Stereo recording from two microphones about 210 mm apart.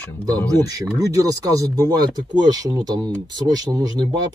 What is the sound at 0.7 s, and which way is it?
Speech, 15° right (ahead or behind).